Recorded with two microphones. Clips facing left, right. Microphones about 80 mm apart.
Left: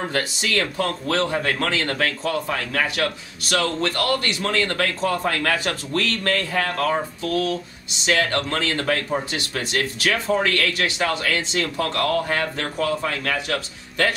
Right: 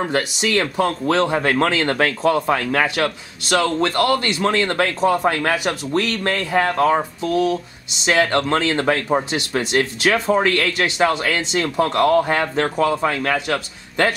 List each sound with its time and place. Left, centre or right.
0.1 s speech: centre